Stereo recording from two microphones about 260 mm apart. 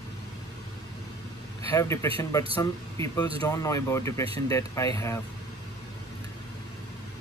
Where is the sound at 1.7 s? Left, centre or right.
Centre.